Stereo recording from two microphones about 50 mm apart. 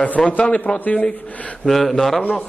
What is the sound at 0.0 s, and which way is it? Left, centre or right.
A man's voice, left.